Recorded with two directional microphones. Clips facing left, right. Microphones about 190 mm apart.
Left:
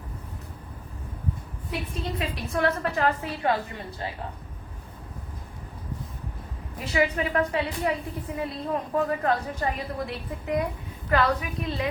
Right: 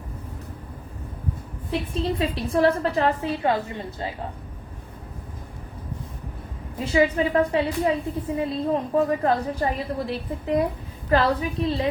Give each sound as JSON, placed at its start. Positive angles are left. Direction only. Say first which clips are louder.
{"t": 1.7, "sound": "a woman's voice", "louder": "right 6 dB", "side_deg": -30}
{"t": 6.7, "sound": "a woman's voice", "louder": "right 5 dB", "side_deg": -30}